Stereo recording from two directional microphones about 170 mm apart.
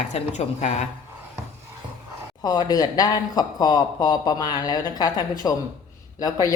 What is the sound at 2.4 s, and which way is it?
Speech, 25° left (ahead or behind).